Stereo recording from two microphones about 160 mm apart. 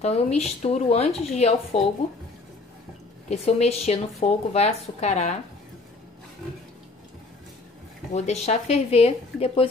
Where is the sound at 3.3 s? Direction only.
40° left (ahead or behind).